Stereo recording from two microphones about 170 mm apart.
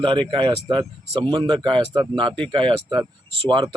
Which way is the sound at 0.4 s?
30° right (ahead or behind).